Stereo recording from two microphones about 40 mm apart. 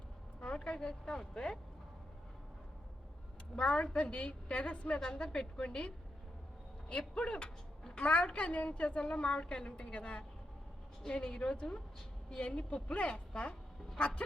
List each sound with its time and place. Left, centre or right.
0.3 s a woman's voice: left
3.5 s a woman's voice: left
7.1 s a woman's voice: left